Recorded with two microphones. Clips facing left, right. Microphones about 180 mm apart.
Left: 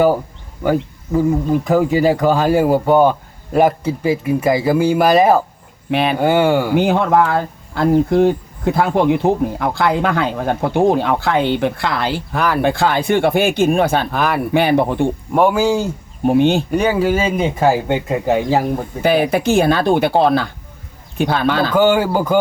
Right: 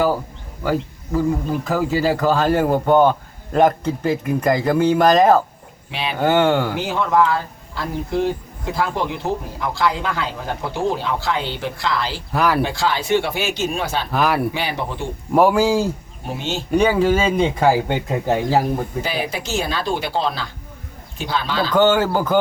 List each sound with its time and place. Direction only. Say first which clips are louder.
0.6 s speech: left 4 dB; 20° left (ahead or behind)
5.9 s speech: left 10 dB; 55° left (ahead or behind)
6.1 s speech: even; 10° left (ahead or behind)
6.7 s speech: left 5 dB; 55° left (ahead or behind)
12.3 s speech: right 2 dB; centre (ahead or behind)
12.6 s speech: left 6 dB; 55° left (ahead or behind)
14.1 s speech: left 1 dB; centre (ahead or behind)
14.5 s speech: left 11 dB; 55° left (ahead or behind)
15.3 s speech: right 1 dB; centre (ahead or behind)
16.2 s speech: left 13 dB; 55° left (ahead or behind)
16.7 s speech: even; 5° left (ahead or behind)
19.0 s speech: left 11 dB; 55° left (ahead or behind)
21.7 s speech: right 1 dB; 10° left (ahead or behind)